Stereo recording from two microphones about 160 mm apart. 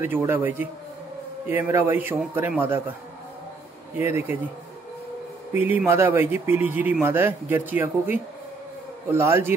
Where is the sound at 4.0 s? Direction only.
15° right (ahead or behind).